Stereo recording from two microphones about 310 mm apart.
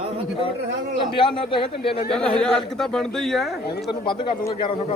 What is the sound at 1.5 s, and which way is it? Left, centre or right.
Speech, centre.